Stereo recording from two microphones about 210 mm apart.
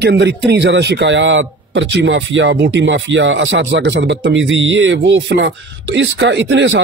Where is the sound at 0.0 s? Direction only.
55° right (ahead or behind).